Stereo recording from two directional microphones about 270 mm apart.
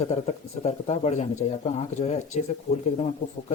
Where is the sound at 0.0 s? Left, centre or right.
Left.